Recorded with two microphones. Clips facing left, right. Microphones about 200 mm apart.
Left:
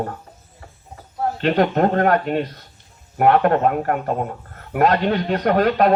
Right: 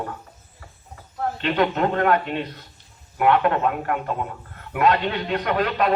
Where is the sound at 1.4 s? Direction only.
45° left (ahead or behind).